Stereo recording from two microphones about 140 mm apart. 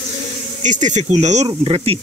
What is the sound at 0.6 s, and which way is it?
Speech, 60° right (ahead or behind).